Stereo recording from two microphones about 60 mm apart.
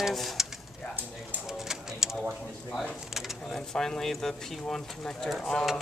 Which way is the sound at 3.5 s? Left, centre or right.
Centre.